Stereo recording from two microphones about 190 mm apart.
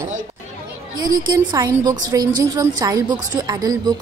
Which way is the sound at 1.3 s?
20° right (ahead or behind).